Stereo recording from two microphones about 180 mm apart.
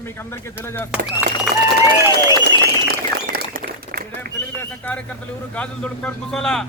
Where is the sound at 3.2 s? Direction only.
55° right (ahead or behind).